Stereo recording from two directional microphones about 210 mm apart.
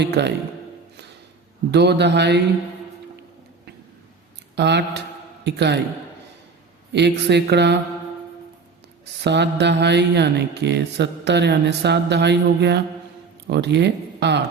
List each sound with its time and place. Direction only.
0.0 s speech: 55° right (ahead or behind)
1.7 s speech: 55° right (ahead or behind)
4.5 s speech: 55° right (ahead or behind)
6.9 s speech: 55° right (ahead or behind)
9.2 s mantra: 55° right (ahead or behind)
13.5 s speech: 55° right (ahead or behind)